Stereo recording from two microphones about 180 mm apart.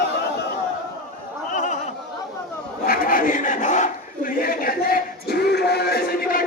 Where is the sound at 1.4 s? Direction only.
45° left (ahead or behind).